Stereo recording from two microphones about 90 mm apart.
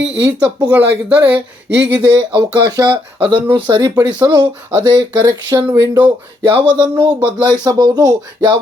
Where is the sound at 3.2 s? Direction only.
65° right (ahead or behind).